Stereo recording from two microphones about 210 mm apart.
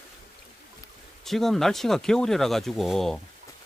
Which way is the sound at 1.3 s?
Centre (ahead or behind).